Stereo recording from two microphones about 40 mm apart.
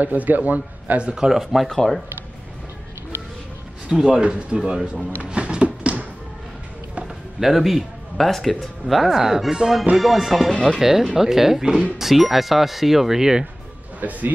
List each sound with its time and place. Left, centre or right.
0.0 s a man's voice: right
1.1 s speech: centre
1.4 s speech: centre
1.7 s speech: centre
3.9 s speech: centre
4.2 s speech: right
5.2 s music: right
7.3 s a man's voice: centre
9.9 s speech: centre
13.9 s speech: right